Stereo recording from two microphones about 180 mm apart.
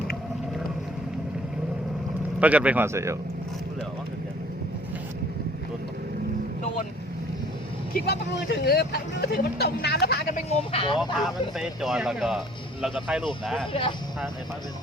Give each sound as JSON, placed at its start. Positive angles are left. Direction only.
{"t": 2.4, "sound": "speech", "side_deg": -10}
{"t": 7.9, "sound": "speech", "side_deg": 65}
{"t": 10.5, "sound": "speech", "side_deg": 30}
{"t": 10.9, "sound": "speech", "side_deg": 0}